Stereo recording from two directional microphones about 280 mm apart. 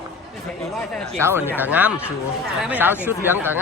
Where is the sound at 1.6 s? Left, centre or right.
Centre.